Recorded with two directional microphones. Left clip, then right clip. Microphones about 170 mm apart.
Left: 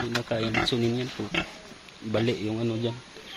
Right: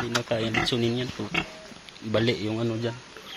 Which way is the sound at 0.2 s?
5° left (ahead or behind).